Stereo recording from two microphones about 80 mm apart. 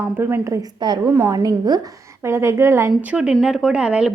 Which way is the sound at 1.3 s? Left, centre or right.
Right.